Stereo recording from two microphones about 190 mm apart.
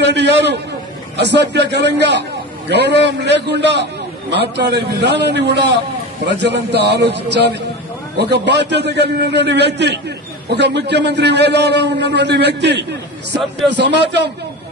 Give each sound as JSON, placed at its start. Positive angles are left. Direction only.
{"t": 0.0, "sound": "a man's voice", "side_deg": -65}